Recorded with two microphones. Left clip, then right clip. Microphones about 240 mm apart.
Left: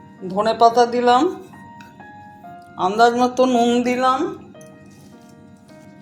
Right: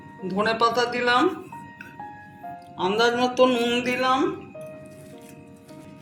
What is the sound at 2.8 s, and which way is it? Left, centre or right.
Speech, left.